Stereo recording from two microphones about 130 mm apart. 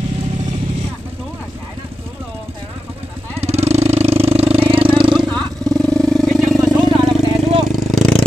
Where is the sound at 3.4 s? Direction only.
55° right (ahead or behind).